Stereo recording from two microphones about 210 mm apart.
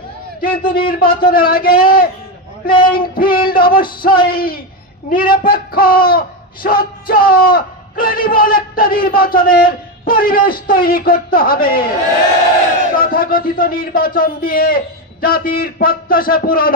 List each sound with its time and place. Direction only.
0.4 s a man's voice: 45° left (ahead or behind)
12.9 s speech: 45° left (ahead or behind)